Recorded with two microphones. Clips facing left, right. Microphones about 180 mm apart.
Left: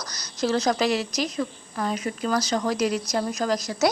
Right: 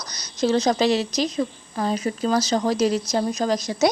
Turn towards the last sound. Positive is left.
turn(degrees=-20)  # may be behind; listen again after turning